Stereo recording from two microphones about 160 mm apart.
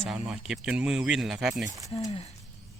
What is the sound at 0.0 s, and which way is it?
Speech, 5° right (ahead or behind).